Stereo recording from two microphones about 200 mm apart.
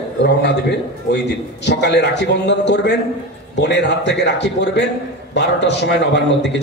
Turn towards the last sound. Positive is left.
turn(degrees=60)  # may be behind; listen again after turning